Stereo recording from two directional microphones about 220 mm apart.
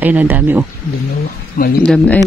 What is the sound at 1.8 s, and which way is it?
Speech, 5° left (ahead or behind).